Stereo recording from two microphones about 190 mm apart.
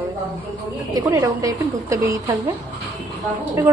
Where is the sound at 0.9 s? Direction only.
20° right (ahead or behind).